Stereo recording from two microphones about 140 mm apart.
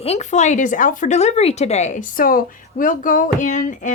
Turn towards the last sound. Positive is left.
turn(degrees=65)  # may be behind; listen again after turning